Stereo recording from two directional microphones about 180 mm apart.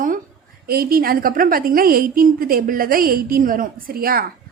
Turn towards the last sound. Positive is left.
turn(degrees=-55)  # may be behind; listen again after turning